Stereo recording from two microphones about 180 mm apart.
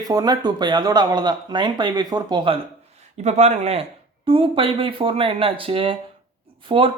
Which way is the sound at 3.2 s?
40° right (ahead or behind).